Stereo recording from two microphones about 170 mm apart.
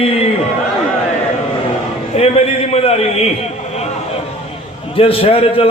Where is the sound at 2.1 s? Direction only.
40° left (ahead or behind).